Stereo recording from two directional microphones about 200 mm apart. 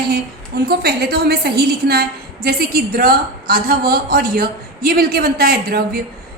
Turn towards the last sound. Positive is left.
turn(degrees=-50)  # may be behind; listen again after turning